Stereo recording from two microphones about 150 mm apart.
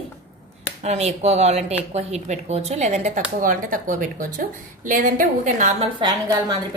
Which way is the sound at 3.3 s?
65° right (ahead or behind).